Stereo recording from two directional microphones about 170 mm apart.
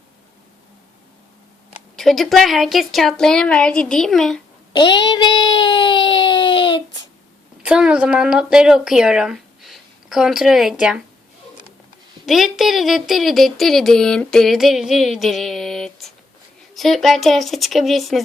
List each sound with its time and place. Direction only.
2.0 s speech: centre (ahead or behind)
4.7 s child singing: 25° left (ahead or behind)
7.6 s speech: 5° right (ahead or behind)
12.2 s speech: centre (ahead or behind)